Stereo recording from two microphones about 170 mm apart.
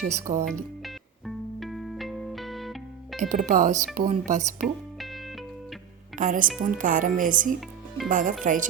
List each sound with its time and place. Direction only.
0.2 s a woman's voice: 45° right (ahead or behind)
0.4 s music: centre (ahead or behind)
3.2 s a woman's voice: 45° right (ahead or behind)
4.6 s music: centre (ahead or behind)
6.1 s a woman's voice: 50° right (ahead or behind)